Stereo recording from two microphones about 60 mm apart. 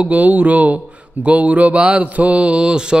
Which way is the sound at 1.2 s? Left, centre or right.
Right.